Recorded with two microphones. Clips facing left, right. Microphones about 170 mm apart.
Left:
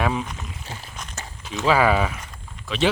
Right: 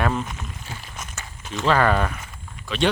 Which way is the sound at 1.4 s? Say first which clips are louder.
Left 1 dB; centre (ahead or behind).